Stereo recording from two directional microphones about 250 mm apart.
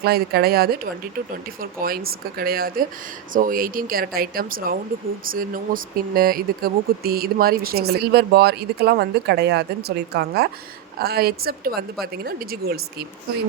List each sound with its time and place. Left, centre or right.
0.0 s speech: right